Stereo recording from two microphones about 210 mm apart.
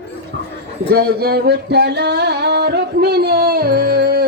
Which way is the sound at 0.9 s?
45° right (ahead or behind).